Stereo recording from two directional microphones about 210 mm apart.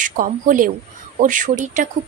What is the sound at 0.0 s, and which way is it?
A woman's voice, 40° right (ahead or behind).